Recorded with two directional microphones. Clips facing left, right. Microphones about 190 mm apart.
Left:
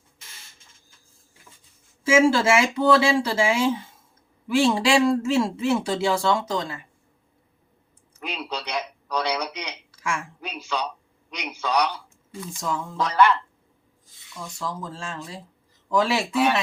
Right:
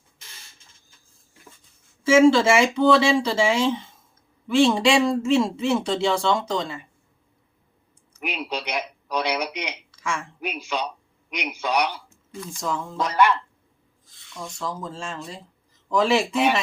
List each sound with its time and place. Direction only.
2.2 s a man's voice: 5° left (ahead or behind)
8.2 s speech: 15° right (ahead or behind)
10.0 s a woman's voice: 5° left (ahead or behind)
10.4 s speech: 20° right (ahead or behind)
12.5 s a man's voice: centre (ahead or behind)
14.3 s a man's voice: centre (ahead or behind)